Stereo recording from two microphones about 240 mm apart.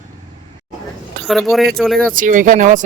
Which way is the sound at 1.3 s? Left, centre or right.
Centre.